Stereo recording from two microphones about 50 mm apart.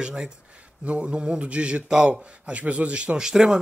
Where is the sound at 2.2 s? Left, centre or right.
Right.